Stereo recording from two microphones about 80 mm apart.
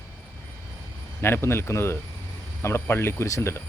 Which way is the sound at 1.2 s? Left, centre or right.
Left.